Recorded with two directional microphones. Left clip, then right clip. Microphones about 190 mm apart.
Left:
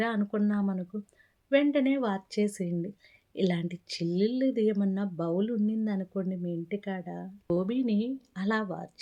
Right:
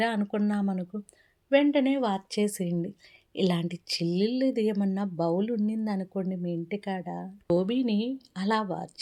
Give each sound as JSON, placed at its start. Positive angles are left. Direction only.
{"t": 0.0, "sound": "a woman's voice", "side_deg": -10}